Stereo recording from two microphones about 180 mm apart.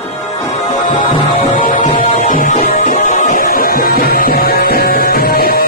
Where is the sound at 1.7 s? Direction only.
45° left (ahead or behind).